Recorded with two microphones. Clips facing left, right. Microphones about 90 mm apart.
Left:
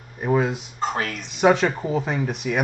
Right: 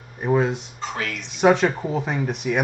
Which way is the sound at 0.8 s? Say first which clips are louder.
Left 3 dB; 40° left (ahead or behind).